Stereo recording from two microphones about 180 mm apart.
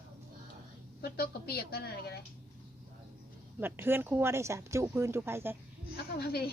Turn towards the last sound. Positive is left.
turn(degrees=60)  # may be behind; listen again after turning